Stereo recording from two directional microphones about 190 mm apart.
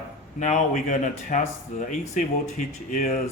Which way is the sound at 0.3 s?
40° left (ahead or behind).